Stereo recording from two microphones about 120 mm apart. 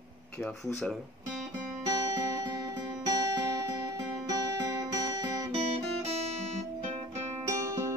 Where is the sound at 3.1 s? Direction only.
35° right (ahead or behind).